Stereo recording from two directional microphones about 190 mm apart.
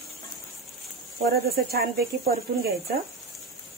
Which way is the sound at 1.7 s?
50° right (ahead or behind).